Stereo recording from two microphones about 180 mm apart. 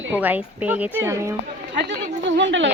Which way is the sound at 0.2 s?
10° right (ahead or behind).